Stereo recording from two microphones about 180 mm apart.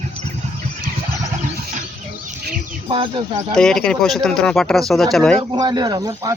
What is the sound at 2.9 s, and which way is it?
Music, 30° right (ahead or behind).